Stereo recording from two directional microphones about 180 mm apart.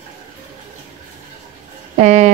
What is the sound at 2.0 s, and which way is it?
Speech, 40° right (ahead or behind).